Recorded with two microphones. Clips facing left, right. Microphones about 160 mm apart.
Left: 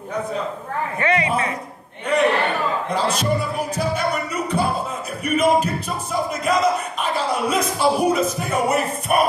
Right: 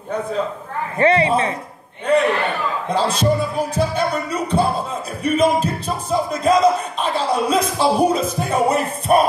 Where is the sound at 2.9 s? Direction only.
30° right (ahead or behind).